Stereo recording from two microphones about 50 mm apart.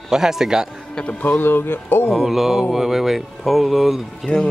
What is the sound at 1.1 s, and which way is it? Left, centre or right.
Speech, left.